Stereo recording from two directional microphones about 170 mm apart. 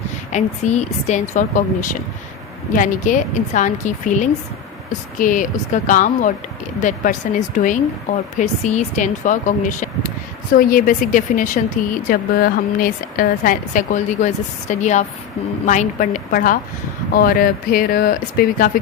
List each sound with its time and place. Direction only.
0.3 s a woman's voice: 45° left (ahead or behind)
12.0 s a woman's voice: 60° left (ahead or behind)